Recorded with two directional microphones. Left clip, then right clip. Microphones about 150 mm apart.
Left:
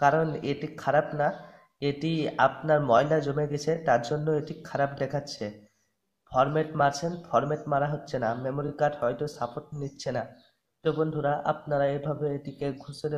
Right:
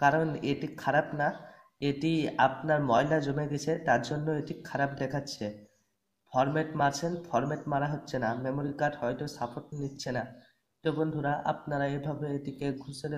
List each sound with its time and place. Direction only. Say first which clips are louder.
0.0 s speech: left 2 dB; 20° left (ahead or behind)
6.3 s speech: left 4 dB; 20° left (ahead or behind)